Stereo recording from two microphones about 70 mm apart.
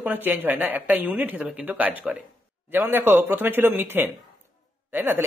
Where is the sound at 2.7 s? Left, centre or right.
Right.